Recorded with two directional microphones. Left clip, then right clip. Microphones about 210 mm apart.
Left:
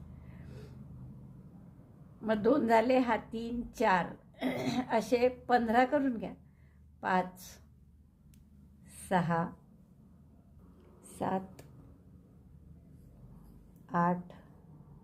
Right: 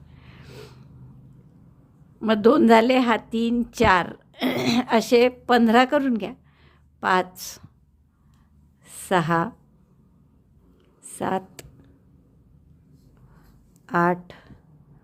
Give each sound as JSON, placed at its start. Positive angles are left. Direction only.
{"t": 0.3, "sound": "snort", "side_deg": -45}
{"t": 2.2, "sound": "a woman's voice", "side_deg": -45}
{"t": 8.8, "sound": "a sound", "side_deg": -40}
{"t": 11.2, "sound": "speech", "side_deg": -35}
{"t": 13.8, "sound": "speech", "side_deg": -35}